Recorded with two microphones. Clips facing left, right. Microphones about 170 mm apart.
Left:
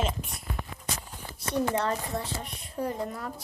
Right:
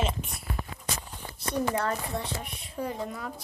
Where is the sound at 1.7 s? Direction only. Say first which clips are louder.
Even; 25° left (ahead or behind).